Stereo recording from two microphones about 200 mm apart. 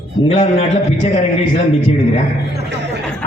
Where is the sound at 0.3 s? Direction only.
30° left (ahead or behind).